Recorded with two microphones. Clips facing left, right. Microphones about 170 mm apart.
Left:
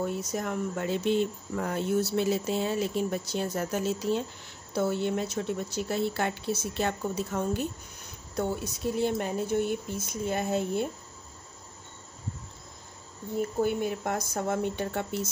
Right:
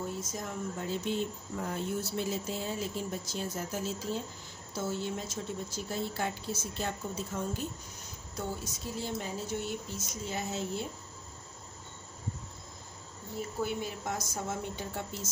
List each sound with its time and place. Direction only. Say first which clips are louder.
0.0 s speech: left 7 dB; 65° left (ahead or behind)
13.4 s speech: left 7 dB; 50° left (ahead or behind)